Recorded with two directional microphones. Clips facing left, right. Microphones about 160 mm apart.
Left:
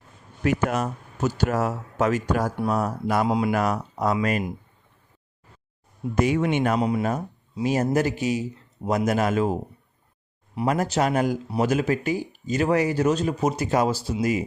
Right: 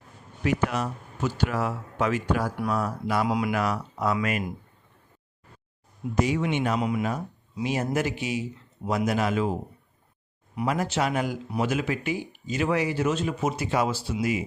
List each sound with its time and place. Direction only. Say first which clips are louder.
0.4 s speech: left 3 dB; 45° left (ahead or behind)
3.2 s speech: left 3 dB; 25° left (ahead or behind)
3.5 s speech: left 3 dB; 40° left (ahead or behind)
6.1 s speech: left 3 dB; 55° left (ahead or behind)
6.7 s speech: left 3 dB; 35° left (ahead or behind)
10.7 s speech: left 4 dB; 40° left (ahead or behind)